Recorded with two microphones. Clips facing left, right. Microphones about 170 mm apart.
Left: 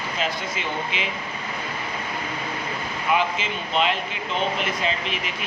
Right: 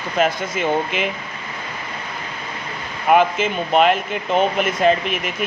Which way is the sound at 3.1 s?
55° right (ahead or behind).